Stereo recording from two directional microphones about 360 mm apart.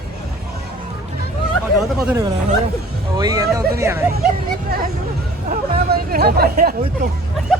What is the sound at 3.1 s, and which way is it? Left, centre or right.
Hubbub, centre.